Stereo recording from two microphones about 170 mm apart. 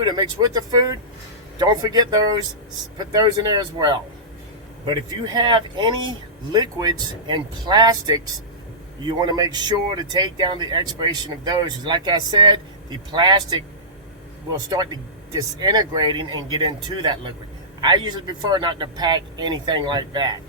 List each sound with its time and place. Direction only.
0.0 s speech: 25° right (ahead or behind)
14.7 s speech: 25° right (ahead or behind)